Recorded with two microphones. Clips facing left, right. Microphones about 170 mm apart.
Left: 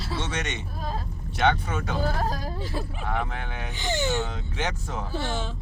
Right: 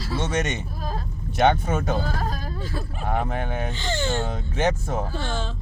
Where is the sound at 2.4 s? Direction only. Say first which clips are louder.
Even; 15° left (ahead or behind).